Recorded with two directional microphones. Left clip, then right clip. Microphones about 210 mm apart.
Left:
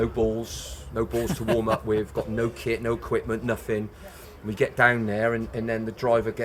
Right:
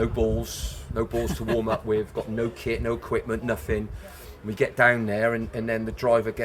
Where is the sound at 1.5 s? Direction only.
30° left (ahead or behind).